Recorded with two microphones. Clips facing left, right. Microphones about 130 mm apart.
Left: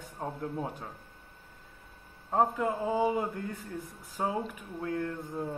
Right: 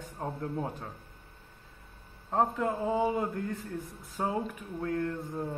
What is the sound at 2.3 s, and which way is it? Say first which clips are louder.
Speech: left 1 dB; 5° left (ahead or behind).